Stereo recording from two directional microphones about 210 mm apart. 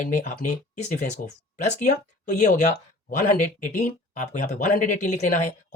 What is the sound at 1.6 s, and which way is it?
Speech, 35° left (ahead or behind).